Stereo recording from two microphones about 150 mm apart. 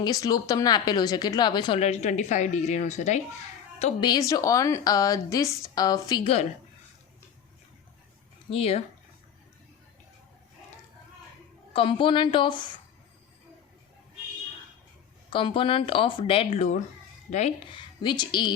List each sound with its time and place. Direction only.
0.0 s a woman's voice: 25° left (ahead or behind)
1.8 s speech: 50° left (ahead or behind)
4.0 s a woman's voice: 25° left (ahead or behind)
6.2 s speech: 45° left (ahead or behind)
8.4 s speech: 40° left (ahead or behind)
11.7 s speech: 35° left (ahead or behind)
15.3 s speech: 35° left (ahead or behind); by 17.4 s 55° left (ahead or behind)
17.7 s speech: 30° left (ahead or behind)